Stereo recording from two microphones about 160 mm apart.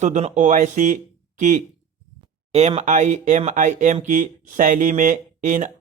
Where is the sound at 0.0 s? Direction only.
45° right (ahead or behind).